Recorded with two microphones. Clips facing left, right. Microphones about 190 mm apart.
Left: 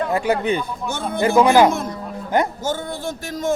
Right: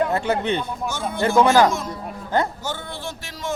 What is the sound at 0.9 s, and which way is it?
Speech, 60° left (ahead or behind).